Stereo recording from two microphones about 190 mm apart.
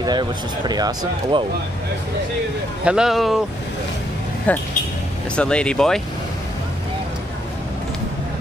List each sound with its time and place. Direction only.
0.0 s speech: 20° right (ahead or behind)
2.8 s speech: 5° right (ahead or behind)
4.5 s speech: 10° left (ahead or behind)